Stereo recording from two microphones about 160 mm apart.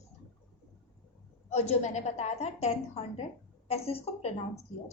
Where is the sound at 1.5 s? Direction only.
45° left (ahead or behind).